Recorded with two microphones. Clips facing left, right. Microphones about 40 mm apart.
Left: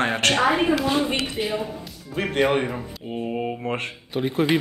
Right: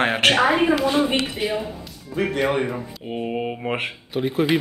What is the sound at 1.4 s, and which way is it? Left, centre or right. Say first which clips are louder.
Speech: right 1 dB; centre.